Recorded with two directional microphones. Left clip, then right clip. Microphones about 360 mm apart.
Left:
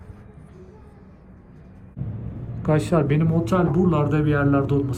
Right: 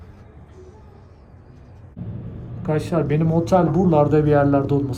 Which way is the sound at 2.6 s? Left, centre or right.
Centre.